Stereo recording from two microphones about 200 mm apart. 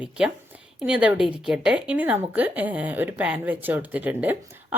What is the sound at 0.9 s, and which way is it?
Speech, 5° right (ahead or behind).